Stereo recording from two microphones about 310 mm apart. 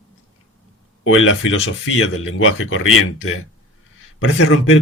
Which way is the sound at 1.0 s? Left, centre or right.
Left.